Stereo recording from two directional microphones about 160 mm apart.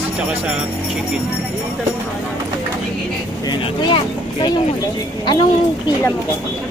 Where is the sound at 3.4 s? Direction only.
30° left (ahead or behind).